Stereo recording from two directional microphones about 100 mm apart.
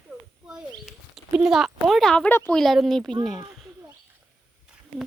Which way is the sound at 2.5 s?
Centre (ahead or behind).